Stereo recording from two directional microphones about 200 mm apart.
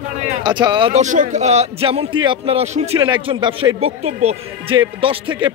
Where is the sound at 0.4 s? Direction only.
25° right (ahead or behind).